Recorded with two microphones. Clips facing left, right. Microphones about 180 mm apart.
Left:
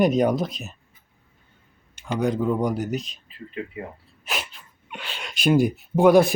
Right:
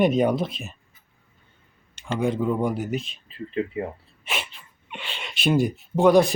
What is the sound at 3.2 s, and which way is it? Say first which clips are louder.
Speech: right 6 dB; 30° right (ahead or behind).